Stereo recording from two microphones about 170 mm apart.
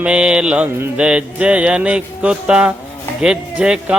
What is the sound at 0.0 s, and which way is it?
A man's voice, 5° right (ahead or behind).